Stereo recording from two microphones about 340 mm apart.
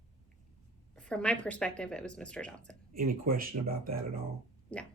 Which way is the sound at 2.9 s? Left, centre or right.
Right.